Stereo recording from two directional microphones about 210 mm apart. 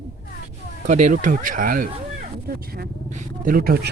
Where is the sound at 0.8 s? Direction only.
35° right (ahead or behind).